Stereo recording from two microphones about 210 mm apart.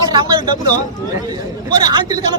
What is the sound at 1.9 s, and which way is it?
Speech, 15° right (ahead or behind).